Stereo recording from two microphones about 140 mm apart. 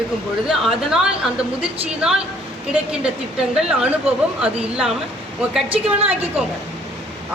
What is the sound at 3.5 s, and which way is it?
Speech, 5° right (ahead or behind).